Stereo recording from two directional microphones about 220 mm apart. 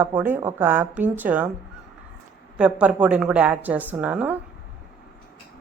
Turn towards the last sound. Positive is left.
turn(degrees=-5)  # may be behind; listen again after turning